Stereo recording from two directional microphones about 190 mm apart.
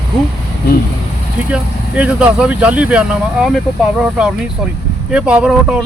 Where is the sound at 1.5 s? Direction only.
5° right (ahead or behind).